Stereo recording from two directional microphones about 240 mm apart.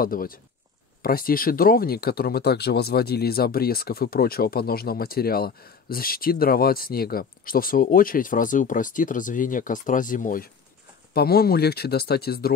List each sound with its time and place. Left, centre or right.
0.0 s speech: left